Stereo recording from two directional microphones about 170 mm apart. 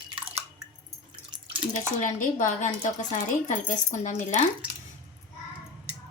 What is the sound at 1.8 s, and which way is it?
Speech, 50° left (ahead or behind).